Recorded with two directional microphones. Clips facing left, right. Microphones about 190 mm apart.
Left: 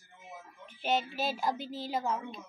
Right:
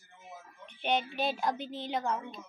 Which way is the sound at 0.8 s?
5° left (ahead or behind).